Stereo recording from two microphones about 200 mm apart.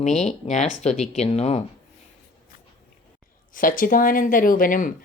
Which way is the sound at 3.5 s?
45° left (ahead or behind).